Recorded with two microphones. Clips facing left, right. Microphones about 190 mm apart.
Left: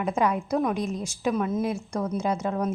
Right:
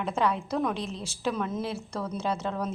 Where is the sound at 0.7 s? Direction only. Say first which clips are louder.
Left 6 dB; 45° left (ahead or behind).